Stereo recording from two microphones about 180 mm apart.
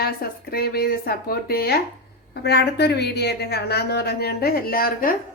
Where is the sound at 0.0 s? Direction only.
55° left (ahead or behind).